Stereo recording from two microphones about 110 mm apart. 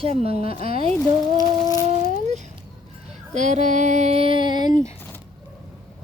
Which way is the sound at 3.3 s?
90° right.